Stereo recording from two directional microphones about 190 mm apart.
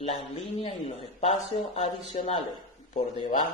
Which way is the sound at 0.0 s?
30° left (ahead or behind).